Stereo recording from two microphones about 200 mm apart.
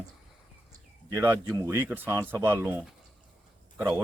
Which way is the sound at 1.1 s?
10° right (ahead or behind).